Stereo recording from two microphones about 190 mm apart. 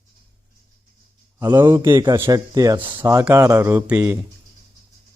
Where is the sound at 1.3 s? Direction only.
15° right (ahead or behind).